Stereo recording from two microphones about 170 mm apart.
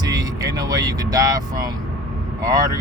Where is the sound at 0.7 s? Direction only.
20° right (ahead or behind).